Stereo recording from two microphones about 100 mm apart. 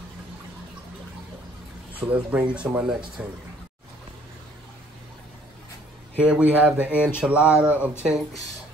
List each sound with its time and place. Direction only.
2.0 s speech: 15° right (ahead or behind)
6.2 s speech: 10° right (ahead or behind)